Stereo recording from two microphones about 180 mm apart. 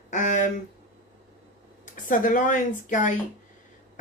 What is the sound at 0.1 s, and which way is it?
Speech, 45° left (ahead or behind).